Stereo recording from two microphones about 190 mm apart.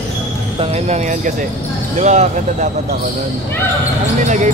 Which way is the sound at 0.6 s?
35° right (ahead or behind).